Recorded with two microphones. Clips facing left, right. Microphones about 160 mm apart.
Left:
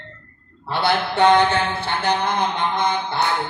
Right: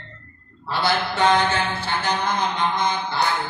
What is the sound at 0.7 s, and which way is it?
Speech, 60° left (ahead or behind).